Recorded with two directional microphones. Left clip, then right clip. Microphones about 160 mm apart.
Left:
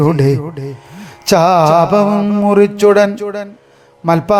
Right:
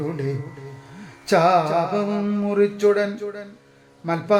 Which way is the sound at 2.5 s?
55° left (ahead or behind).